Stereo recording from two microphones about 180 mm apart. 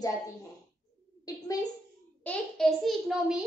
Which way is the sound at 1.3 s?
20° left (ahead or behind).